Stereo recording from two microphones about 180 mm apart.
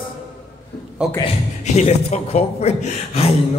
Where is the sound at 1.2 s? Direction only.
35° left (ahead or behind).